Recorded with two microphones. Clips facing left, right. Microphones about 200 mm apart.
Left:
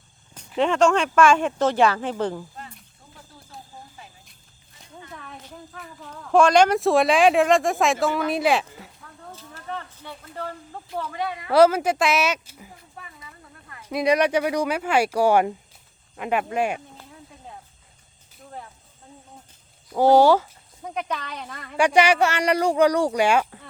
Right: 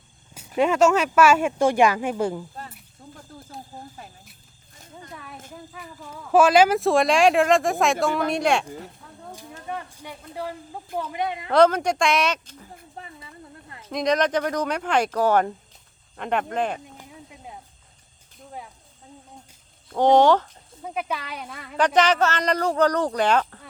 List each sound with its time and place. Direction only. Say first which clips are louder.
0.3 s speech: right 1 dB; 10° right (ahead or behind)
3.2 s snake: right 3 dB; 45° right (ahead or behind)
5.1 s a sound: even; 5° right (ahead or behind)
5.5 s speech: right 1 dB; 5° right (ahead or behind)
9.3 s a sound: right 1 dB; 15° right (ahead or behind)
10.9 s speech: right 1 dB; 15° right (ahead or behind)
11.5 s speech: left 1 dB; 5° left (ahead or behind)
13.0 s a sound: right 3 dB; 30° right (ahead or behind)
13.8 s speech: left 2 dB; 10° left (ahead or behind)
19.9 s speech: left 1 dB; 5° left (ahead or behind)
20.8 s speech: even; 5° right (ahead or behind)
21.8 s speech: left 1 dB; 10° left (ahead or behind)